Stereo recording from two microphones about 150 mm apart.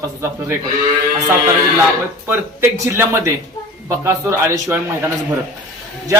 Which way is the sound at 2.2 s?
15° right (ahead or behind).